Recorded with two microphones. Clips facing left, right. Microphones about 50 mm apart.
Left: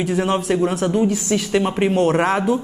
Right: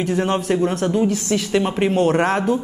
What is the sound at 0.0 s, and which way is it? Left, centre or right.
Speech, centre.